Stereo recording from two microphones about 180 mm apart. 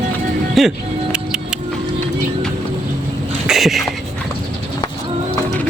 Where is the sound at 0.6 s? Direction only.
Centre (ahead or behind).